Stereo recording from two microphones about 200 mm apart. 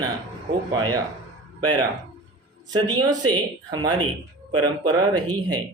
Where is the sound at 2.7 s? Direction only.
20° right (ahead or behind).